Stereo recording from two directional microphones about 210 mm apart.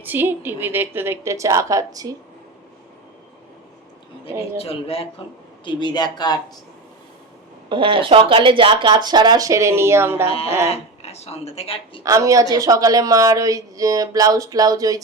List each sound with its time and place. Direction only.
0.0 s a woman's voice: 10° right (ahead or behind)
4.4 s speech: 30° left (ahead or behind)
7.7 s speech: 25° right (ahead or behind)
10.2 s speech: 30° left (ahead or behind)
12.0 s a woman's voice: 15° right (ahead or behind)